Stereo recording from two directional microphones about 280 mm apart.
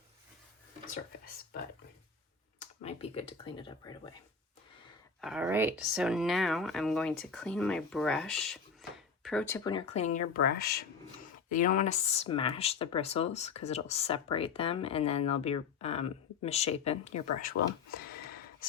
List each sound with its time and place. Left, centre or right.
2.6 s speech: left
5.2 s speech: centre; by 17.5 s left